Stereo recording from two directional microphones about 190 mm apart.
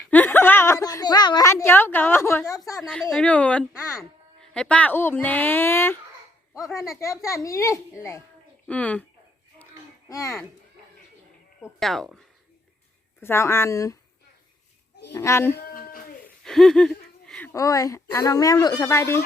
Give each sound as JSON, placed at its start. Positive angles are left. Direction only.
{"t": 0.1, "sound": "a sound", "side_deg": 10}
{"t": 2.8, "sound": "speech", "side_deg": 0}
{"t": 4.4, "sound": "speech", "side_deg": 5}
{"t": 10.1, "sound": "a child's voice", "side_deg": 15}
{"t": 11.8, "sound": "speech", "side_deg": 0}
{"t": 13.1, "sound": "speech", "side_deg": 10}
{"t": 15.1, "sound": "speech", "side_deg": 15}
{"t": 15.5, "sound": "a sound", "side_deg": 50}
{"t": 16.2, "sound": "speech", "side_deg": 0}